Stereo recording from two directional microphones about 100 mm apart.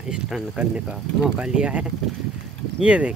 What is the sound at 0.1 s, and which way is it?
Speech, 10° right (ahead or behind).